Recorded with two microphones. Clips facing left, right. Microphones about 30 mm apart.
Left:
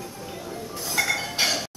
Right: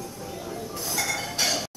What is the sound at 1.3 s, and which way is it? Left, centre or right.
Chink, centre.